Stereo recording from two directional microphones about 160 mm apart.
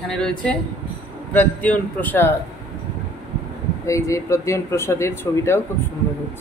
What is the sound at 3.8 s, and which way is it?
Speech, 20° left (ahead or behind).